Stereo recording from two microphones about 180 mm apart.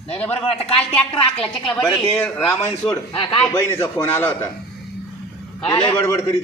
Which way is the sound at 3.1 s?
25° left (ahead or behind).